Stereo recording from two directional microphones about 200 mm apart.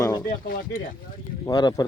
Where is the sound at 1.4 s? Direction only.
20° left (ahead or behind).